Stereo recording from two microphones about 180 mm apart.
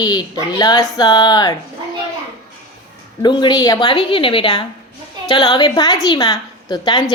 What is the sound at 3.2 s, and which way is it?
Speech, 25° left (ahead or behind).